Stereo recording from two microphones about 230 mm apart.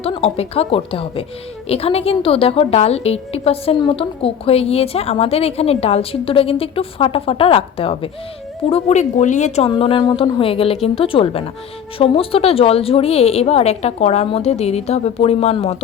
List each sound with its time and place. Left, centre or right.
0.0 s a woman's voice: left